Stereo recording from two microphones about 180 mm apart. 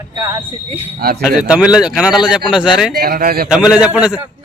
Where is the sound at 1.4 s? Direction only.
5° right (ahead or behind).